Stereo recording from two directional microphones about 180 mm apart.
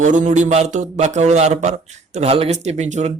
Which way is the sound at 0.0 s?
45° right (ahead or behind).